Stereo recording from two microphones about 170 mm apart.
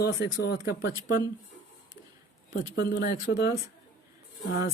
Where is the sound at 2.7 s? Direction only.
60° left (ahead or behind).